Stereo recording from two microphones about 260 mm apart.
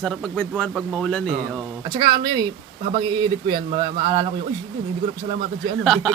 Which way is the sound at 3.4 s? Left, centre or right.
Centre.